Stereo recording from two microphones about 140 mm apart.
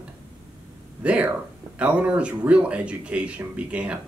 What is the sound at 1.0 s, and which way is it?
Speech, 10° right (ahead or behind).